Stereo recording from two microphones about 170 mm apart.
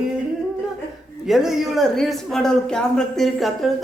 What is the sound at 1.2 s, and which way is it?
A woman's voice, 5° right (ahead or behind).